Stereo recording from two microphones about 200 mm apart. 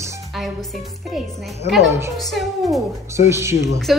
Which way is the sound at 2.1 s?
Centre (ahead or behind).